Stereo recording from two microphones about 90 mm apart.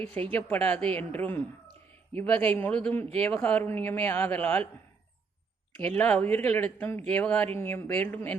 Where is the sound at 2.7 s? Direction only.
10° left (ahead or behind).